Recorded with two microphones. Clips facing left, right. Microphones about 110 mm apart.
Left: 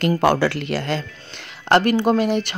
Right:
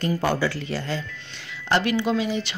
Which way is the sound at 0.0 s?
75° left (ahead or behind).